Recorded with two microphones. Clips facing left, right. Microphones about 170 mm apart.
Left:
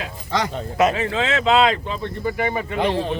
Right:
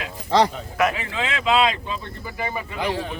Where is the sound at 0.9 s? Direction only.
30° left (ahead or behind).